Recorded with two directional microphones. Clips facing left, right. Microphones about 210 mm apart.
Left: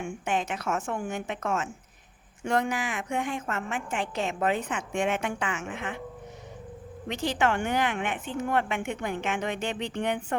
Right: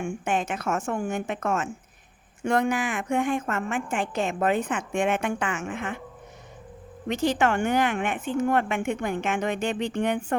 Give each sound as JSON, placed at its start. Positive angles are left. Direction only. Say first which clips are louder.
{"t": 0.0, "sound": "a woman's voice", "louder": "right 3 dB", "side_deg": -50}
{"t": 7.1, "sound": "a woman's voice", "louder": "right 4 dB", "side_deg": -45}